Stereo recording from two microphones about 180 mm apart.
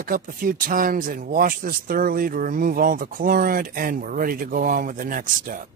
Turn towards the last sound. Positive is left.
turn(degrees=-50)  # may be behind; listen again after turning